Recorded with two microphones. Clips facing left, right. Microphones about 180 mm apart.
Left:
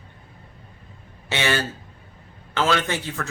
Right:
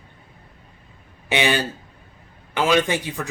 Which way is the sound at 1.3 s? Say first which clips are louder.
Right 3 dB; 15° right (ahead or behind).